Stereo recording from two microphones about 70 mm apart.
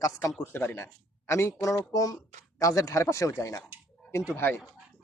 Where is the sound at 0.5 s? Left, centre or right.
Left.